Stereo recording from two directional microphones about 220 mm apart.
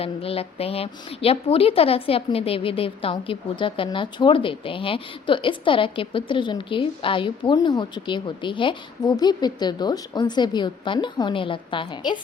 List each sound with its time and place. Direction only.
0.0 s a woman's voice: 25° left (ahead or behind)